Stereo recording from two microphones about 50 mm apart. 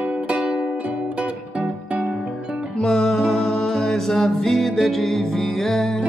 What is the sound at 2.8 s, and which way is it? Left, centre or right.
Music, centre.